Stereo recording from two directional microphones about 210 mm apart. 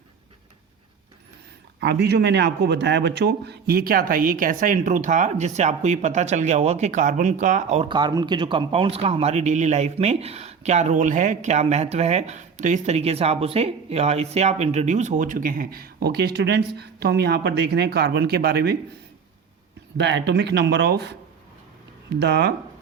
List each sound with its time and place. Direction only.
1.8 s a man's voice: 55° right (ahead or behind)
20.0 s speech: 55° right (ahead or behind)